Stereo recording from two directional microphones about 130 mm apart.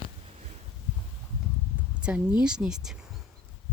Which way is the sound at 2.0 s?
10° right (ahead or behind).